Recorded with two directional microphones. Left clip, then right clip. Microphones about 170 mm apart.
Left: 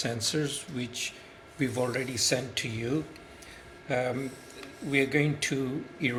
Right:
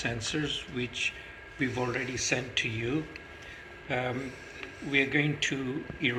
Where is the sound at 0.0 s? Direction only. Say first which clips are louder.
Left 2 dB; 60° left (ahead or behind).